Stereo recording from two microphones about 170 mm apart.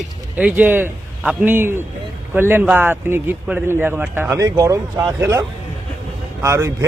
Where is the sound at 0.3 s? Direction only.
10° right (ahead or behind).